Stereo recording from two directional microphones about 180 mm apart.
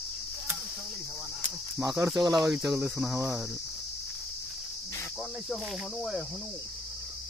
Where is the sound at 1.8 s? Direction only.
15° right (ahead or behind).